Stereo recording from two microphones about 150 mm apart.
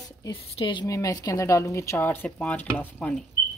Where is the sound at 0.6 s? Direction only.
30° left (ahead or behind); by 3.2 s 10° left (ahead or behind).